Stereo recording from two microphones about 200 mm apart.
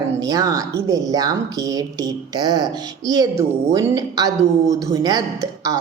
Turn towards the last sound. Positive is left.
turn(degrees=-15)  # may be behind; listen again after turning